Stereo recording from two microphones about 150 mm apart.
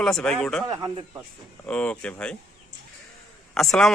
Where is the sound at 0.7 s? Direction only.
30° right (ahead or behind).